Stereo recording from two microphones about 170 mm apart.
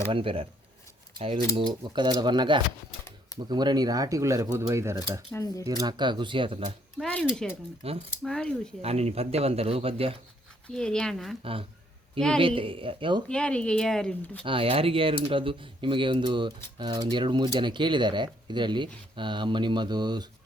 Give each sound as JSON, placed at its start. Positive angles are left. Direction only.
{"t": 0.1, "sound": "speech", "side_deg": -30}
{"t": 1.5, "sound": "speech", "side_deg": -25}
{"t": 5.3, "sound": "speech", "side_deg": 20}
{"t": 5.6, "sound": "speech", "side_deg": -20}
{"t": 7.0, "sound": "speech", "side_deg": 0}
{"t": 7.8, "sound": "speech", "side_deg": -35}
{"t": 8.2, "sound": "speech", "side_deg": 5}
{"t": 8.8, "sound": "speech", "side_deg": -40}
{"t": 10.7, "sound": "speech", "side_deg": 5}
{"t": 12.4, "sound": "speech", "side_deg": -30}
{"t": 13.2, "sound": "speech", "side_deg": 5}
{"t": 14.4, "sound": "speech", "side_deg": -30}